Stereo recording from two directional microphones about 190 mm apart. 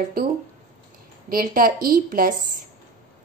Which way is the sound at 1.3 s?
50° right (ahead or behind).